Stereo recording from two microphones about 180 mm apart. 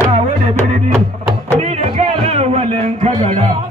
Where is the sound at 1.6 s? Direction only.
35° right (ahead or behind).